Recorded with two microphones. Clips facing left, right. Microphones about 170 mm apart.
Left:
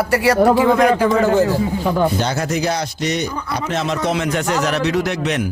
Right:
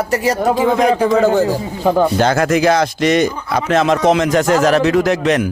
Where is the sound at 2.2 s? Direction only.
90° right.